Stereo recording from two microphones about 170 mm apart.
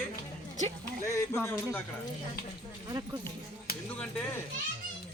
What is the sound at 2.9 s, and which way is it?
Speech, 20° right (ahead or behind).